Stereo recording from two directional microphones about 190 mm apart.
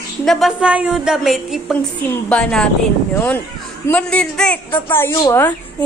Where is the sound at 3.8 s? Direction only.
5° left (ahead or behind).